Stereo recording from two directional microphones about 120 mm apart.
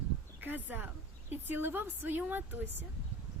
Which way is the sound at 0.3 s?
15° right (ahead or behind).